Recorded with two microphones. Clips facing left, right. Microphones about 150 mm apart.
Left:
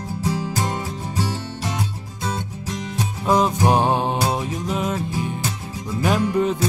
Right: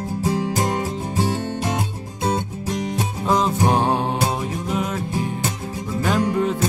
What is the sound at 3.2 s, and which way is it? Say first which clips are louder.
Music: left 1 dB; 15° left (ahead or behind).